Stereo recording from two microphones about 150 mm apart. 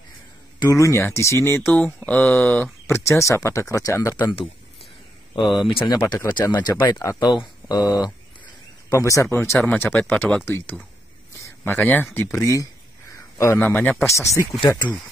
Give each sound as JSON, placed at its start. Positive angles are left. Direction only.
{"t": 0.6, "sound": "speech", "side_deg": 20}
{"t": 6.2, "sound": "speech", "side_deg": 15}
{"t": 6.9, "sound": "speech", "side_deg": 25}
{"t": 13.1, "sound": "a sound", "side_deg": 20}
{"t": 13.7, "sound": "speech", "side_deg": 10}